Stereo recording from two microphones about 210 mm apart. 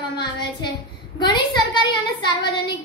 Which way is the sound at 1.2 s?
20° left (ahead or behind).